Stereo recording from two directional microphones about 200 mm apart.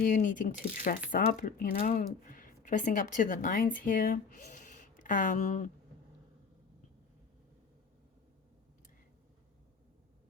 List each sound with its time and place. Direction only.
0.0 s speech: 40° left (ahead or behind)